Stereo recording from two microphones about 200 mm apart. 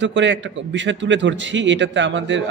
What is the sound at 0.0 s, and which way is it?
A man's voice, 65° right (ahead or behind).